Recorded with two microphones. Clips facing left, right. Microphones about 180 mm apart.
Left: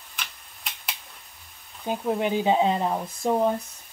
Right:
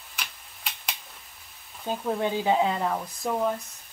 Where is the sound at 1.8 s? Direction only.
15° left (ahead or behind).